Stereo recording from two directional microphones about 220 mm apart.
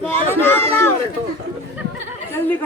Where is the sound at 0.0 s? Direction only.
10° left (ahead or behind).